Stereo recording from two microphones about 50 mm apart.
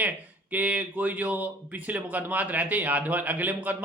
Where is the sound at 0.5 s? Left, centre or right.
Right.